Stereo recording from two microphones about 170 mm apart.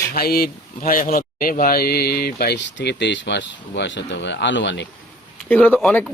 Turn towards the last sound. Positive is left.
turn(degrees=5)  # may be behind; listen again after turning